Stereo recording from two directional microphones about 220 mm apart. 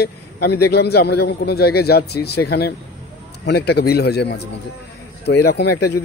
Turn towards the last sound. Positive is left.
turn(degrees=45)  # may be behind; listen again after turning